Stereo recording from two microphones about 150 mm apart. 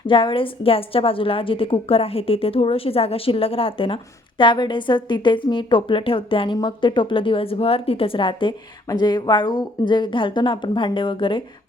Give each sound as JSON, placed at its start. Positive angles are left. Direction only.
{"t": 0.1, "sound": "a woman's voice", "side_deg": 35}